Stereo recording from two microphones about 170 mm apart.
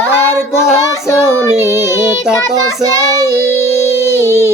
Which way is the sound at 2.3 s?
15° left (ahead or behind).